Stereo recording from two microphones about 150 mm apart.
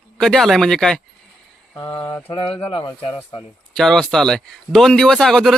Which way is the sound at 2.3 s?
35° left (ahead or behind).